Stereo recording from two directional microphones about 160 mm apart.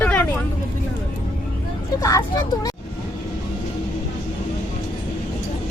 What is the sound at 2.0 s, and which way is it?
Vehicle, 20° left (ahead or behind).